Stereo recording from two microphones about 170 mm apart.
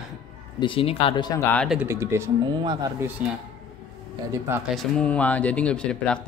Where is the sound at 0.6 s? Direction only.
30° left (ahead or behind).